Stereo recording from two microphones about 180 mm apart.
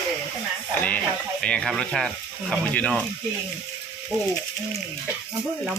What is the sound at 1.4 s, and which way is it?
Speech, 5° left (ahead or behind).